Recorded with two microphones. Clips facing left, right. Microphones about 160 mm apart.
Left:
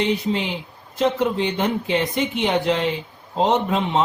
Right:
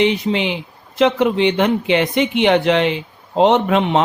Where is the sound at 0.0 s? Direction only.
80° right.